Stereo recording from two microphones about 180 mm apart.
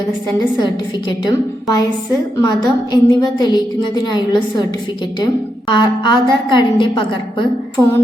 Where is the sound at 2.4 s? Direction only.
20° left (ahead or behind).